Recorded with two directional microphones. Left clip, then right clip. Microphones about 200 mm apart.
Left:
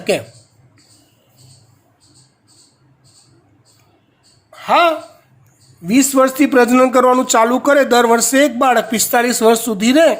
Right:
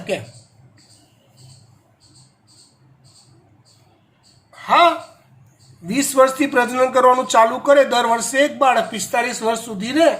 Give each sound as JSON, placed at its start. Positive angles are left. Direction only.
{"t": 4.5, "sound": "speech", "side_deg": 55}